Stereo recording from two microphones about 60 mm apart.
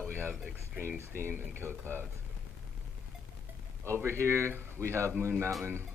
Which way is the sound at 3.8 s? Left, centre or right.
Right.